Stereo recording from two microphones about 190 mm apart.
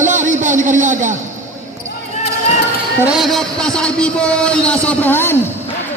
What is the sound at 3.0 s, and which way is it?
Speech, centre (ahead or behind).